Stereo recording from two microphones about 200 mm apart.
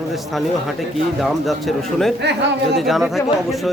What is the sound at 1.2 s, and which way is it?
Speech, centre (ahead or behind).